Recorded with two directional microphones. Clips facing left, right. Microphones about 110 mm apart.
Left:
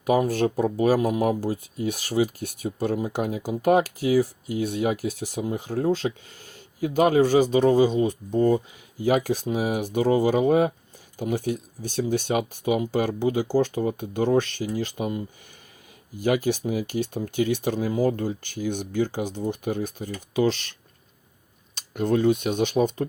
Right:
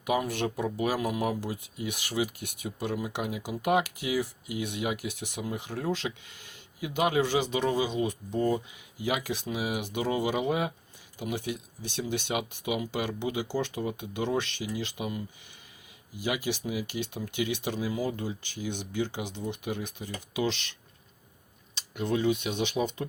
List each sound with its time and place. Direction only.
0.0 s speech: 40° left (ahead or behind)
21.8 s speech: 45° left (ahead or behind)